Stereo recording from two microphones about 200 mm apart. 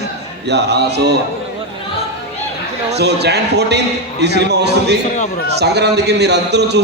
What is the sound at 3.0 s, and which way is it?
A man's voice, 55° right (ahead or behind).